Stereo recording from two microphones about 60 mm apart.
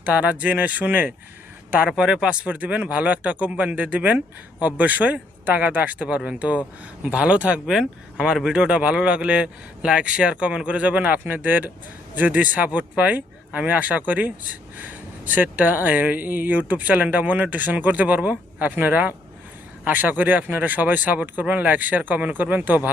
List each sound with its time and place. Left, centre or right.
0.0 s speech: right
1.9 s speech: centre